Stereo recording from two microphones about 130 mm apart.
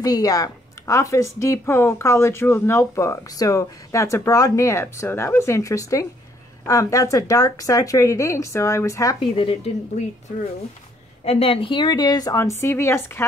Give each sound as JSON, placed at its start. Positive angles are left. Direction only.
{"t": 0.0, "sound": "a woman's voice", "side_deg": 30}
{"t": 9.2, "sound": "a woman's voice", "side_deg": 45}
{"t": 10.0, "sound": "speech", "side_deg": 60}
{"t": 11.2, "sound": "a woman's voice", "side_deg": 50}